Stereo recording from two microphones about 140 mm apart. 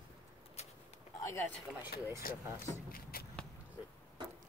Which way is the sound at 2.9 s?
90° left.